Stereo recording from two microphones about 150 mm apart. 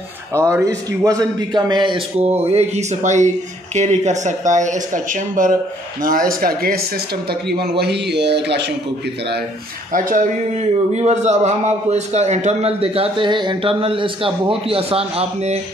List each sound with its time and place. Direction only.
0.3 s a man's voice: 20° right (ahead or behind); by 5.5 s 60° right (ahead or behind)
6.0 s a man's voice: 70° right (ahead or behind)
7.2 s a man's voice: 90° right
9.9 s speech: 60° right (ahead or behind)
11.0 s a man's voice: 45° right (ahead or behind)